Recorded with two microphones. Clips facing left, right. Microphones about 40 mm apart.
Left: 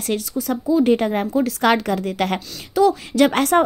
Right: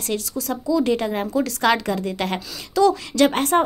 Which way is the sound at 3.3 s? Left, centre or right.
Left.